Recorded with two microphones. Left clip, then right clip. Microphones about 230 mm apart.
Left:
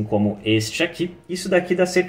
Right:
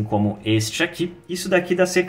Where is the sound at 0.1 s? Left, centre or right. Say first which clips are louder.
Left 1 dB; right.